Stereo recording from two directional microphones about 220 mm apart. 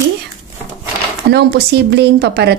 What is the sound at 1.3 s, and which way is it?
Speech, 50° right (ahead or behind).